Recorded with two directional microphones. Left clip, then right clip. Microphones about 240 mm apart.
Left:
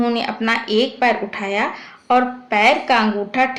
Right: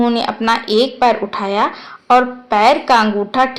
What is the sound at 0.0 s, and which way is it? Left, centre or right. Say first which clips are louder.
Speech: right 4 dB; centre.